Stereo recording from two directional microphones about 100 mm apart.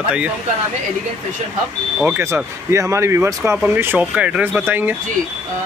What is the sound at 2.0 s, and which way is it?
Speech, 20° right (ahead or behind).